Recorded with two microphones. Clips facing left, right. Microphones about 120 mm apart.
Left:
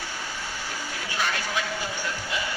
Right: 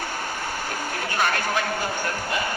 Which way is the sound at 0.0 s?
55° right (ahead or behind).